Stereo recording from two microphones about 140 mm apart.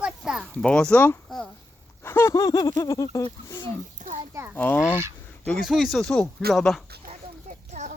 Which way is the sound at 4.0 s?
65° right (ahead or behind).